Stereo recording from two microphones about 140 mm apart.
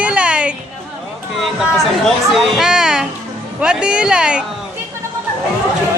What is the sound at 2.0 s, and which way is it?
Speech, centre (ahead or behind).